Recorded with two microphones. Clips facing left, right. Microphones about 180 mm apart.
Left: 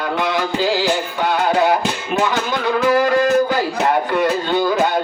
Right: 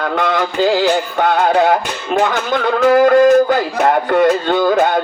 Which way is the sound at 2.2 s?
50° right (ahead or behind).